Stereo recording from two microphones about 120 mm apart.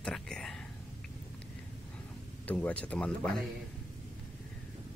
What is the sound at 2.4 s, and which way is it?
Speech, 10° left (ahead or behind).